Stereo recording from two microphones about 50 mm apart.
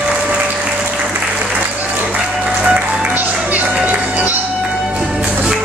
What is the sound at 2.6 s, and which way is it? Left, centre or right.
Music, right.